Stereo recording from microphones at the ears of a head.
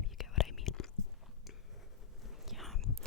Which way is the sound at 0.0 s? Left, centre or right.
Left.